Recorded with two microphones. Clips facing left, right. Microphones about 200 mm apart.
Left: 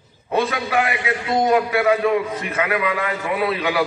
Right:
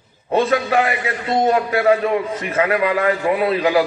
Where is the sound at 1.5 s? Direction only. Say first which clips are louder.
Right 2 dB; 35° right (ahead or behind).